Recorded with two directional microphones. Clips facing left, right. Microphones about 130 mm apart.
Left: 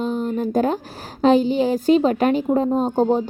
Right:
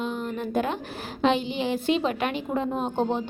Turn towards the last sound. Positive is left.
turn(degrees=40)  # may be behind; listen again after turning